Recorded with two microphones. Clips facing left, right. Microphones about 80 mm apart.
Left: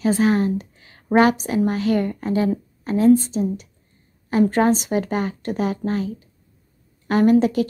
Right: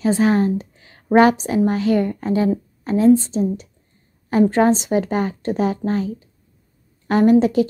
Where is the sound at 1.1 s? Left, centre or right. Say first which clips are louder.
Right 3 dB; right.